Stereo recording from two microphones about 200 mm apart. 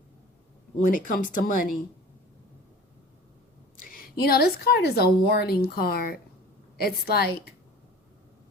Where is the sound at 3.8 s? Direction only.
45° left (ahead or behind).